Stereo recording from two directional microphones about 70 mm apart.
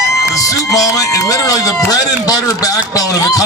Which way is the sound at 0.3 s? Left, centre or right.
Left.